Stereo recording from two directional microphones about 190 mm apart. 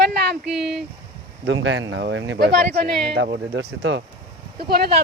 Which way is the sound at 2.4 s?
55° right (ahead or behind).